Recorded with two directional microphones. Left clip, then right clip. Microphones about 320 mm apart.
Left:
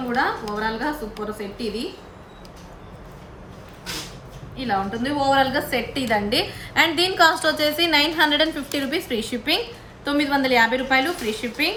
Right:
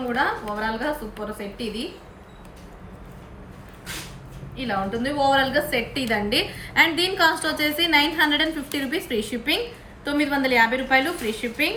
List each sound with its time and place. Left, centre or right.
0.1 s a woman's voice: centre
4.5 s a woman's voice: centre